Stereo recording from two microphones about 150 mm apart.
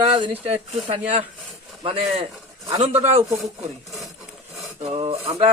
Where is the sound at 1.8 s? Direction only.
40° right (ahead or behind).